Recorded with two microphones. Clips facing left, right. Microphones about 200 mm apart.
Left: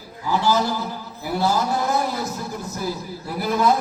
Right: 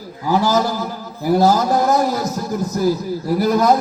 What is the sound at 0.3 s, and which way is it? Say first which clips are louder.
A man's voice: right 4 dB; 40° right (ahead or behind).